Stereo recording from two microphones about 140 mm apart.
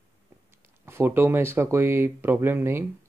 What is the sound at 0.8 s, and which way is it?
Speech, 15° right (ahead or behind).